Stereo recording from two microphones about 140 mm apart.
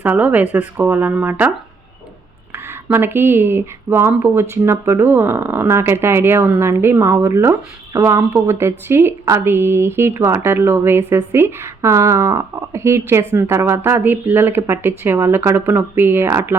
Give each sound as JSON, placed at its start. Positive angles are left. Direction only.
{"t": 0.0, "sound": "speech", "side_deg": -10}
{"t": 2.9, "sound": "speech", "side_deg": -15}